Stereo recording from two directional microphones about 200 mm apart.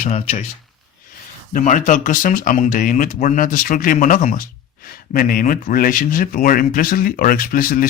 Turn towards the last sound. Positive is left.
turn(degrees=45)  # may be behind; listen again after turning